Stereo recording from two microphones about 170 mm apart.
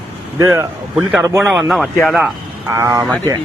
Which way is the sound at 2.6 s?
15° right (ahead or behind).